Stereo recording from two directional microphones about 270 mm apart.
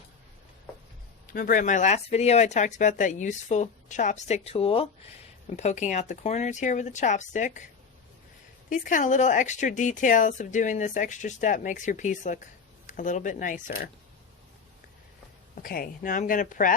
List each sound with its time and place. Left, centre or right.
1.3 s speech: left
8.7 s speech: left
15.6 s speech: left